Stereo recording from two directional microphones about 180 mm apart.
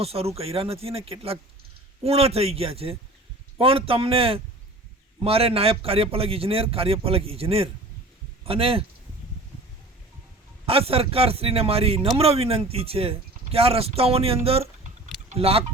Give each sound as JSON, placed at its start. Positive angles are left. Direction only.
{"t": 0.0, "sound": "a man's voice", "side_deg": -35}
{"t": 10.7, "sound": "a man's voice", "side_deg": -30}